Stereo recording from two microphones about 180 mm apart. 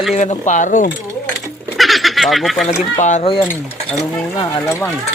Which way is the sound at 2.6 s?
40° left (ahead or behind).